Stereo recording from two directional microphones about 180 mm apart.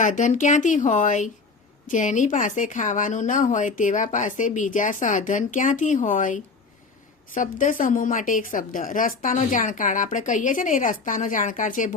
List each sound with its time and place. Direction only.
0.0 s a woman's voice: 45° left (ahead or behind)